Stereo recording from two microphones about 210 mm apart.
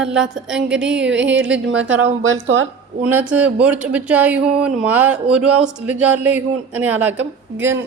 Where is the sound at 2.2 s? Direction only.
65° right (ahead or behind).